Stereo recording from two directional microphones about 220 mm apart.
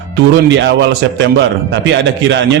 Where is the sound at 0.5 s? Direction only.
55° right (ahead or behind).